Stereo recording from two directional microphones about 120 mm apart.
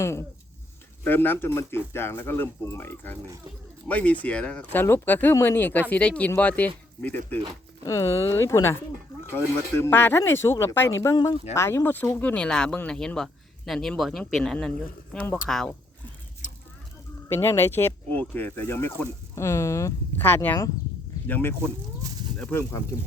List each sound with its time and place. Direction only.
0.0 s speech: 25° left (ahead or behind)
7.9 s speech: 25° left (ahead or behind); by 15.7 s 5° left (ahead or behind)
17.2 s speech: 20° left (ahead or behind)